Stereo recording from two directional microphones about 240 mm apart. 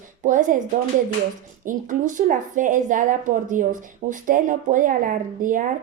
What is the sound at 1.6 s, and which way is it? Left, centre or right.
Speech, right.